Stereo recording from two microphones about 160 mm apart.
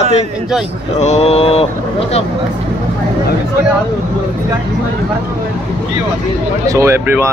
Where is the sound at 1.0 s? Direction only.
40° left (ahead or behind).